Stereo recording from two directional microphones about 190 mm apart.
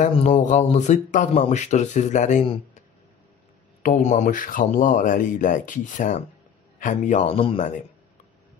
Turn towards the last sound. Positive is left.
turn(degrees=30)  # may be behind; listen again after turning